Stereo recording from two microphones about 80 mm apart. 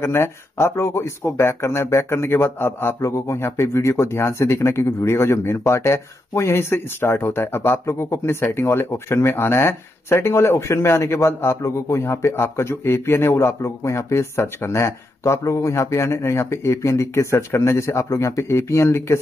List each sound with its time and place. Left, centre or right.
0.0 s speech: left